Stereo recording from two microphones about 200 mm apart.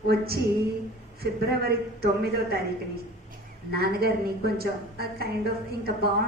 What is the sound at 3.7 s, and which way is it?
A woman's voice, 50° right (ahead or behind).